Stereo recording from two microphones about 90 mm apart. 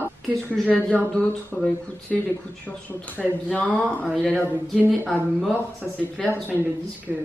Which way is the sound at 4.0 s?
5° left (ahead or behind).